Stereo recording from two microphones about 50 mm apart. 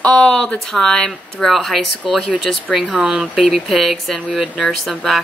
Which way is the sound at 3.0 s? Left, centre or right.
Centre.